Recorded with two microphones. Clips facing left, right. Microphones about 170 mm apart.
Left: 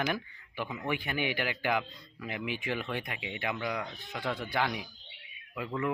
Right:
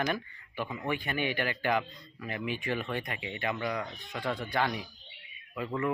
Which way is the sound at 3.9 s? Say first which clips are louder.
Right 1 dB; 20° right (ahead or behind).